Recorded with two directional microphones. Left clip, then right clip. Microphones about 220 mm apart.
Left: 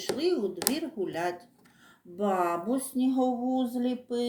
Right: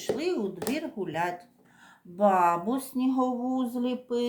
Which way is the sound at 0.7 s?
35° right (ahead or behind).